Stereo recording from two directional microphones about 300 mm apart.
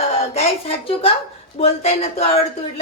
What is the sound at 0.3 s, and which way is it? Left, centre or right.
A woman's voice, centre.